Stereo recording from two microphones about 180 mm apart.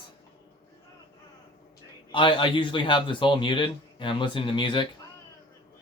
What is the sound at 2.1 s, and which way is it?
Speech, 25° left (ahead or behind).